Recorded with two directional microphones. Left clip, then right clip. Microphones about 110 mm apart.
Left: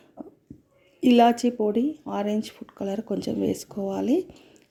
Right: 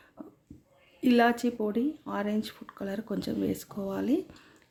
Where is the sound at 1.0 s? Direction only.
40° left (ahead or behind).